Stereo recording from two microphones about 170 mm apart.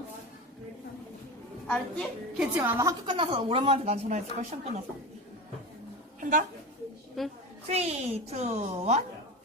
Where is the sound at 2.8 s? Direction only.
20° right (ahead or behind).